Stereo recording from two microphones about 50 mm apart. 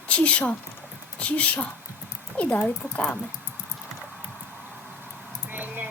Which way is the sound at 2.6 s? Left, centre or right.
Centre.